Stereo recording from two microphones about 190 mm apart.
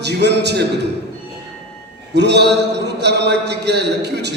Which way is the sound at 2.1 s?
60° right (ahead or behind).